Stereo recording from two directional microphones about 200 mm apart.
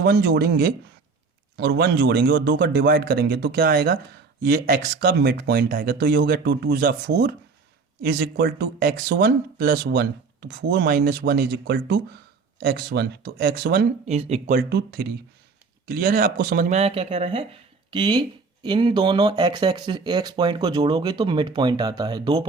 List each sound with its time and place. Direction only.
0.0 s speech: 55° right (ahead or behind)
14.0 s speech: 30° right (ahead or behind)
14.5 s speech: 50° right (ahead or behind); by 22.4 s 20° right (ahead or behind)